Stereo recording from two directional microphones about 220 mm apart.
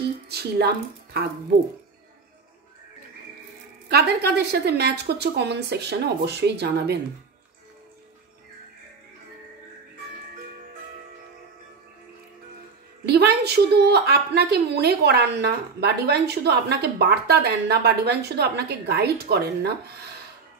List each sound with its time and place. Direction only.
0.3 s a woman's voice: 45° right (ahead or behind)
3.9 s a woman's voice: 50° right (ahead or behind)
13.0 s a woman's voice: 50° right (ahead or behind)